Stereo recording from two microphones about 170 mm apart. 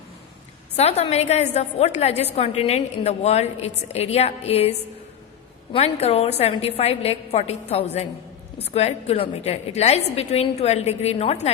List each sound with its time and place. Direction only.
0.8 s a woman's voice: 40° left (ahead or behind)